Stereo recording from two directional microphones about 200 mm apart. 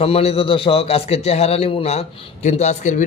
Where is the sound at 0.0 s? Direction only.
30° left (ahead or behind).